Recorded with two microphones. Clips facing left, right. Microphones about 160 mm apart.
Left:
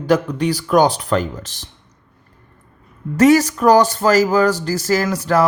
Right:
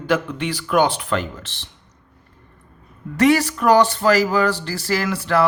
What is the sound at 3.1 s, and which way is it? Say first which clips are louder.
Speech: left 4 dB; 40° left (ahead or behind).